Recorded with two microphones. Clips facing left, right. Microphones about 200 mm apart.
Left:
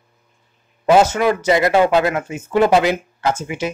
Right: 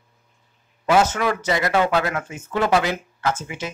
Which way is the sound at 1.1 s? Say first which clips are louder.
Left 6 dB; 15° left (ahead or behind).